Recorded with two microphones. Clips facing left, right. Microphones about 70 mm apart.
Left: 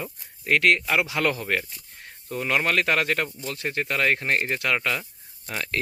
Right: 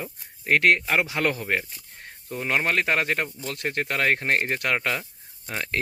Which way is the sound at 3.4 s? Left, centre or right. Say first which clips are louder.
Even; right.